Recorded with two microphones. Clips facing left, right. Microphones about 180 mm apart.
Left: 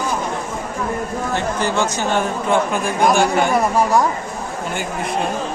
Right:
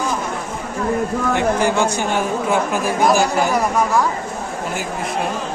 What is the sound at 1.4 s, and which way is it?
Speech, 15° right (ahead or behind).